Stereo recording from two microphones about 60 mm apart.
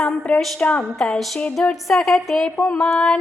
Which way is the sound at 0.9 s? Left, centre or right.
Centre.